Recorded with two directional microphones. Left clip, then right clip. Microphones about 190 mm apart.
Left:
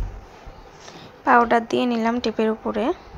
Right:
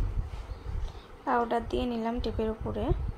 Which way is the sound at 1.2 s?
25° left (ahead or behind).